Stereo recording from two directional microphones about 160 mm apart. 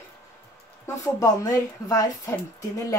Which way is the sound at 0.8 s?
20° left (ahead or behind).